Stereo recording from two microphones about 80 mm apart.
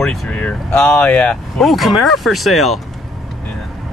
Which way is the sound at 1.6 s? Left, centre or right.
Centre.